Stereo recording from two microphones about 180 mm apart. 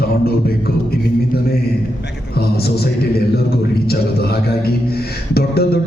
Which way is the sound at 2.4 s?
60° left (ahead or behind).